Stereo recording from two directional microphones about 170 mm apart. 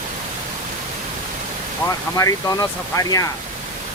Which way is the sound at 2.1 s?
20° left (ahead or behind).